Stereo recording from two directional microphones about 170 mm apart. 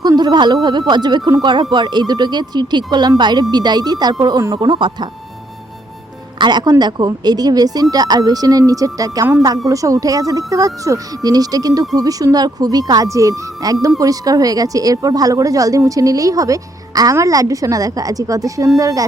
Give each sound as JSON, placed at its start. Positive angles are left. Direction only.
{"t": 0.0, "sound": "a woman's voice", "side_deg": -25}
{"t": 6.4, "sound": "a woman's voice", "side_deg": -25}